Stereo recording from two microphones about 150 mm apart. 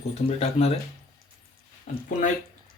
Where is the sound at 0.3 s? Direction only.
45° left (ahead or behind).